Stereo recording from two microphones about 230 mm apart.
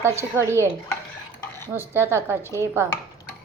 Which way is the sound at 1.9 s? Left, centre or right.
Centre.